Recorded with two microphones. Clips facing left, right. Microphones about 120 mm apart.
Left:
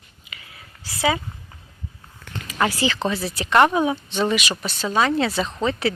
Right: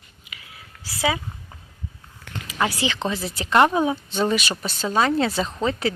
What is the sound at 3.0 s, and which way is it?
Speech, 25° right (ahead or behind).